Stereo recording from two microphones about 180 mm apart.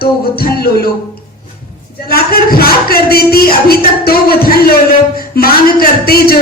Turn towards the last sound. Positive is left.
turn(degrees=55)  # may be behind; listen again after turning